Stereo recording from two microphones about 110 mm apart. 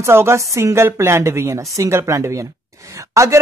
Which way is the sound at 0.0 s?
25° right (ahead or behind).